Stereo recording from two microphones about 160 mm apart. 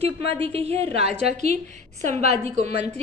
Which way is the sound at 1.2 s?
75° left (ahead or behind).